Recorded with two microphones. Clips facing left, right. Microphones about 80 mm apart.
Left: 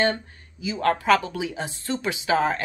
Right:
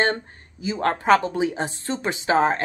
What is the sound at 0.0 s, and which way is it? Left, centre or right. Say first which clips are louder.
Speech: right 1 dB; right.